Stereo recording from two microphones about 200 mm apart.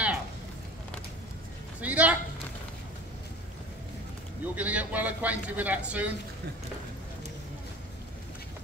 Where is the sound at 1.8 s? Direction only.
5° right (ahead or behind).